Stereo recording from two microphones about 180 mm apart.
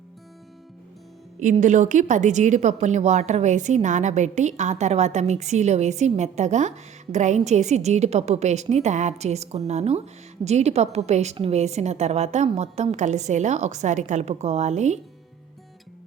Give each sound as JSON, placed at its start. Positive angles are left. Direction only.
{"t": 1.4, "sound": "a woman's voice", "side_deg": -45}